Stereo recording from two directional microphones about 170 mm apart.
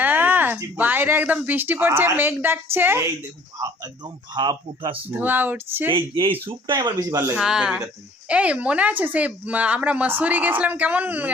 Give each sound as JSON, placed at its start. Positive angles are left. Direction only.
{"t": 0.0, "sound": "speech", "side_deg": -10}
{"t": 5.1, "sound": "speech", "side_deg": -10}
{"t": 5.9, "sound": "speech", "side_deg": -30}
{"t": 7.3, "sound": "speech", "side_deg": -5}